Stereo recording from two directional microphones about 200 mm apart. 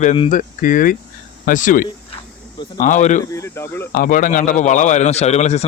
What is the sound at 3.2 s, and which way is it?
Speech, 15° left (ahead or behind).